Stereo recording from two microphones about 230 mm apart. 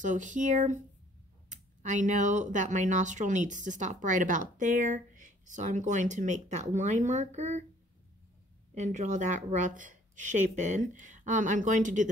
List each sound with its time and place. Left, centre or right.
0.0 s speech: right
8.7 s speech: right